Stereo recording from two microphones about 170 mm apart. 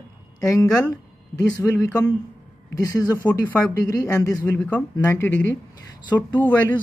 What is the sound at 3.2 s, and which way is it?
Speech, 10° left (ahead or behind).